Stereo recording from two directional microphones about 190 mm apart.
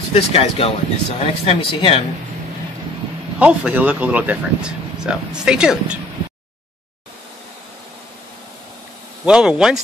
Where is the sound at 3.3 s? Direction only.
5° right (ahead or behind).